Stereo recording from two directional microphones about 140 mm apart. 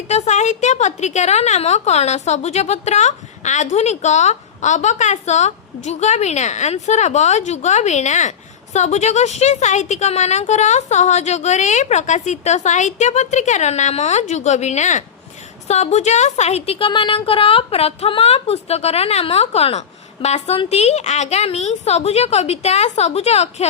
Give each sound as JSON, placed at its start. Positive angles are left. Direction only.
{"t": 0.1, "sound": "a woman's voice", "side_deg": 55}